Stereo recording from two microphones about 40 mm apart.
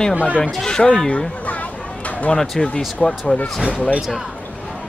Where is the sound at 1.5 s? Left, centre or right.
Left.